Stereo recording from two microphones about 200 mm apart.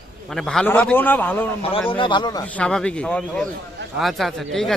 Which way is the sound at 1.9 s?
25° left (ahead or behind).